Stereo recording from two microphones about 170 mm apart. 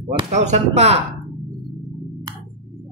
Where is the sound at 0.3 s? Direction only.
45° right (ahead or behind).